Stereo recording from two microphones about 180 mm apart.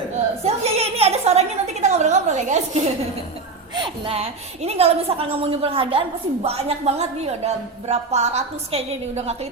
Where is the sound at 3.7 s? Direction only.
30° right (ahead or behind).